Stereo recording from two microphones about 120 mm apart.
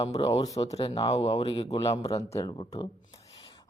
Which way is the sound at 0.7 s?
55° left (ahead or behind).